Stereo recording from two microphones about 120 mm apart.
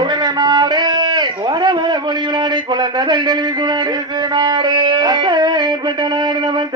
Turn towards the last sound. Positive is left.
turn(degrees=-40)  # may be behind; listen again after turning